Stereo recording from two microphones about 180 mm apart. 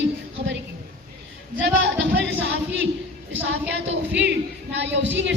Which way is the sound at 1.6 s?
75° right (ahead or behind).